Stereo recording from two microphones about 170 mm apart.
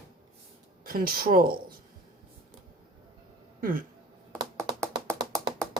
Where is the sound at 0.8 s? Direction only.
60° right (ahead or behind).